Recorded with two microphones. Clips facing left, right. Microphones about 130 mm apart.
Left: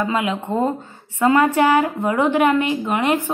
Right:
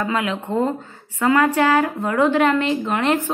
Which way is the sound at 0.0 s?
20° left (ahead or behind).